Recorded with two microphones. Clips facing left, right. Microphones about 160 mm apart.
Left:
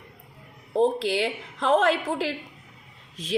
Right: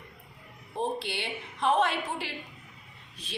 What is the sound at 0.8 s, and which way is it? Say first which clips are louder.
A woman's voice: left 10 dB; 90° left.